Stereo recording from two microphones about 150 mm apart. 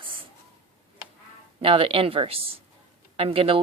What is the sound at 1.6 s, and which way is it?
Speech, 40° right (ahead or behind).